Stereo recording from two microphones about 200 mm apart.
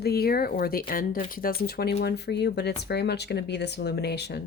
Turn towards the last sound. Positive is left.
turn(degrees=55)  # may be behind; listen again after turning